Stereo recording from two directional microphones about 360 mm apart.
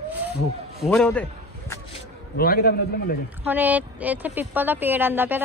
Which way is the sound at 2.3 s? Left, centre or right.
Left.